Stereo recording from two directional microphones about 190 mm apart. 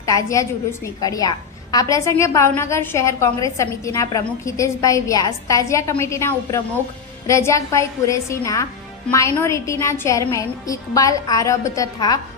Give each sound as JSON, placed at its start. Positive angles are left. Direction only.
{"t": 0.0, "sound": "a woman's voice", "side_deg": 15}